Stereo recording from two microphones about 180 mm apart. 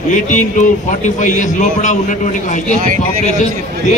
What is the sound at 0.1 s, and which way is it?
A man's voice, 45° left (ahead or behind).